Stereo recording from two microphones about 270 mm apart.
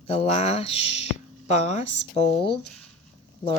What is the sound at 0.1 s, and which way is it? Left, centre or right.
Speech, left.